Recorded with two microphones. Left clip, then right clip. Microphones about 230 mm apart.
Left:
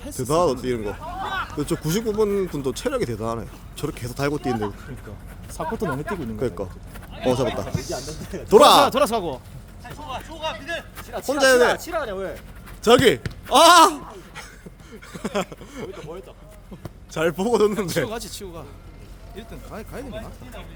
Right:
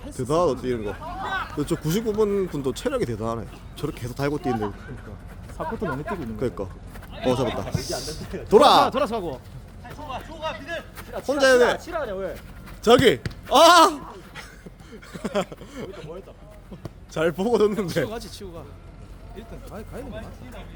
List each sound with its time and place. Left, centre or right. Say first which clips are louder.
0.2 s speech: left 1 dB; centre
5.9 s speech: left 2 dB; centre
7.2 s a sound: left 2 dB; centre
7.7 s a man's voice: even; right
8.4 s speech: left 2 dB; centre
8.9 s speech: left 4 dB; left
10.1 s a sound: left 2 dB; left
11.3 s a sound: left 1 dB; centre
11.8 s speech: left 2 dB; left
12.8 s speech: left 1 dB; centre
15.1 s a sound: even; centre
16.8 s a man's voice: left 1 dB; centre
18.1 s speech: left 3 dB; left